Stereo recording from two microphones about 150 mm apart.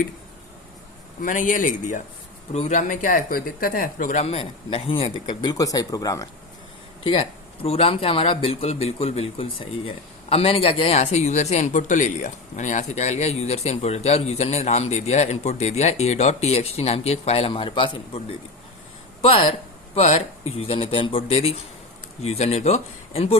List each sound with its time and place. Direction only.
1.2 s speech: 60° left (ahead or behind)
4.2 s speech: 40° left (ahead or behind); by 6.2 s 25° left (ahead or behind)
7.0 s speech: 40° left (ahead or behind)